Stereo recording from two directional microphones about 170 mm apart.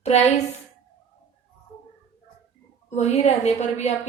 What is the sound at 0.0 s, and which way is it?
Speech, 40° left (ahead or behind).